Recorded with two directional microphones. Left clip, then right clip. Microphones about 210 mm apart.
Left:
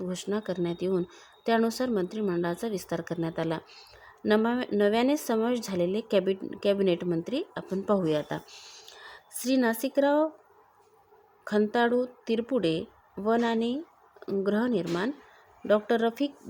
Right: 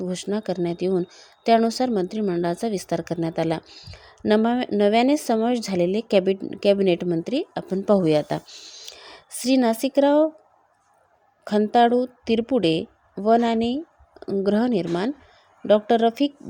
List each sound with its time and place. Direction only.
0.0 s speech: 15° right (ahead or behind)
8.4 s speech: 10° right (ahead or behind)
11.4 s speech: 15° right (ahead or behind)